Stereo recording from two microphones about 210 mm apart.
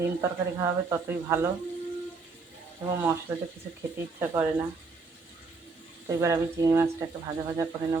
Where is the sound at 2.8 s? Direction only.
10° right (ahead or behind).